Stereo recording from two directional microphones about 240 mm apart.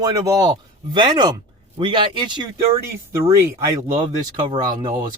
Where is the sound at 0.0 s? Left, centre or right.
Centre.